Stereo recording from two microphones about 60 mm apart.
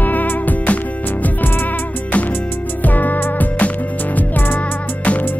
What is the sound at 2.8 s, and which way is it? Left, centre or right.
Music, left.